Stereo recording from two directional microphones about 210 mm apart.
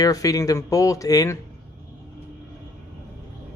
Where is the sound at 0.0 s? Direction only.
15° left (ahead or behind).